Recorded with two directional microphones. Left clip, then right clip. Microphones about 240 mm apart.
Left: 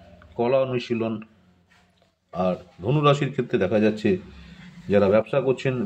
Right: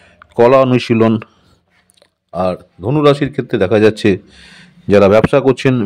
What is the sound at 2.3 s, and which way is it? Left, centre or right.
A man's voice, right.